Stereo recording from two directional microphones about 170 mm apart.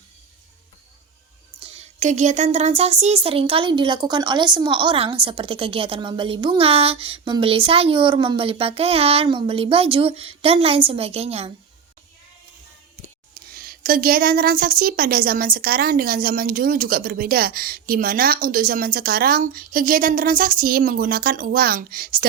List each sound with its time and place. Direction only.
1.6 s speech: 40° right (ahead or behind)
13.3 s a woman's voice: 60° right (ahead or behind)